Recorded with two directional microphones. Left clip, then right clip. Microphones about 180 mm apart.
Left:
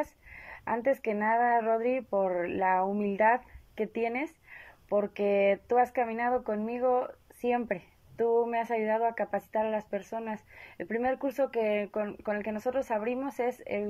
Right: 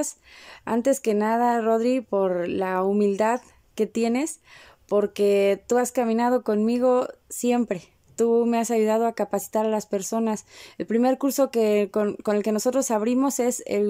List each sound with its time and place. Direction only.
0.0 s speech: 30° right (ahead or behind)